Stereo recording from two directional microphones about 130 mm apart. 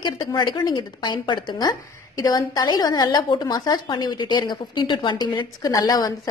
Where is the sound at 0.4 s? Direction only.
35° left (ahead or behind).